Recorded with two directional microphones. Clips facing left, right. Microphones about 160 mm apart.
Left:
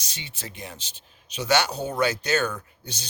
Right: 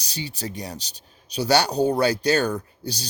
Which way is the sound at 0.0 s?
35° right (ahead or behind).